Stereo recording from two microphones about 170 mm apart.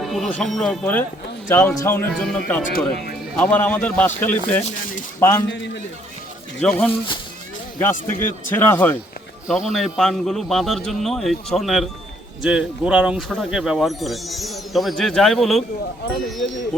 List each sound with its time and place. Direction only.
0.0 s a man's voice: centre (ahead or behind)
2.7 s speech: 65° left (ahead or behind)
3.3 s a man's voice: 10° left (ahead or behind)
5.5 s a man's voice: 90° left
6.6 s a man's voice: 5° left (ahead or behind)
9.5 s speech: 5° right (ahead or behind)